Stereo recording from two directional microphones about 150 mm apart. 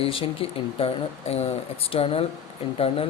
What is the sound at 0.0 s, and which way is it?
Speech, 40° left (ahead or behind).